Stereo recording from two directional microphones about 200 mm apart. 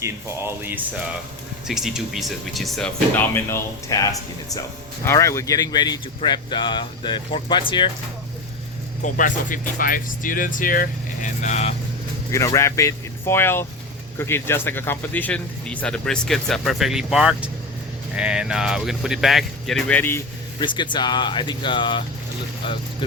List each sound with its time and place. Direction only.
0.0 s speech: 10° right (ahead or behind); by 7.6 s 25° left (ahead or behind)
9.1 s speech: 40° left (ahead or behind)
12.3 s speech: 15° left (ahead or behind)
20.7 s speech: 25° left (ahead or behind)